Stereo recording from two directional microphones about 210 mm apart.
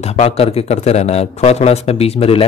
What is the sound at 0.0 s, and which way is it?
Speech, 30° left (ahead or behind).